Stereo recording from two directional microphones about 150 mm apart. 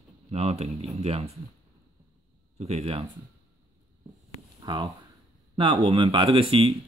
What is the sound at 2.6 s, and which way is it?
Speech, 45° right (ahead or behind).